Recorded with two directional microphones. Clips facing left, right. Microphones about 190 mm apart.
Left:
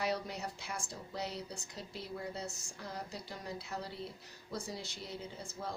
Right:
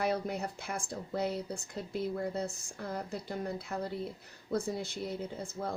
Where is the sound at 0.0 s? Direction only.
55° right (ahead or behind).